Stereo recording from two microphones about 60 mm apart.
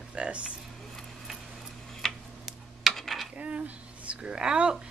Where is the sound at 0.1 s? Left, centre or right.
Centre.